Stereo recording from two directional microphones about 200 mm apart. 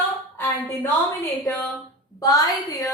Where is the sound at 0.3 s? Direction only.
10° left (ahead or behind).